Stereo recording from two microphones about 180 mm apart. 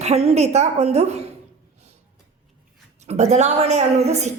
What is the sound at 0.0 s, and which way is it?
A woman's voice, 35° right (ahead or behind).